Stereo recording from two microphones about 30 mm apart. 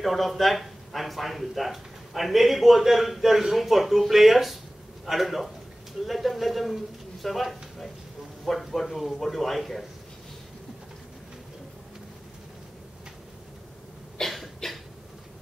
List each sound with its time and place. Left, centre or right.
0.0 s a man's voice: centre
14.2 s cough: centre
14.6 s a sound: centre